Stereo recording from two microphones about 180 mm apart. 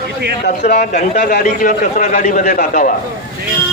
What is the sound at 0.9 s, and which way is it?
A man's voice, 60° left (ahead or behind).